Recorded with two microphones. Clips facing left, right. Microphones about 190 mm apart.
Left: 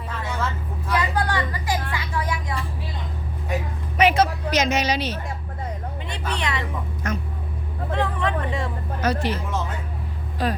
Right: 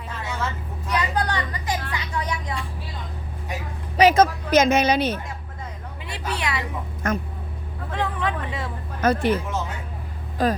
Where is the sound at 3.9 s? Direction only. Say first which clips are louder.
Right 3 dB; 45° right (ahead or behind).